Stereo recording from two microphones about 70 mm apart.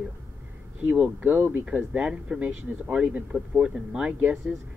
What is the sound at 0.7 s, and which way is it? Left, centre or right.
Speech, centre.